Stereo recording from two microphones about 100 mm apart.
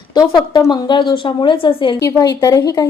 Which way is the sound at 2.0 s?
35° left (ahead or behind).